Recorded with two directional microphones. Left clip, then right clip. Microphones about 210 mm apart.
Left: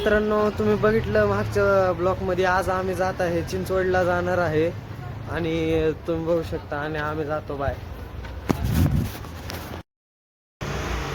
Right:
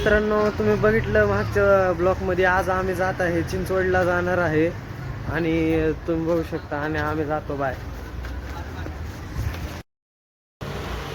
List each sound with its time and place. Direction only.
0.0 s speech: 5° left (ahead or behind)
3.4 s speech: 20° left (ahead or behind)
3.8 s speech: 10° left (ahead or behind)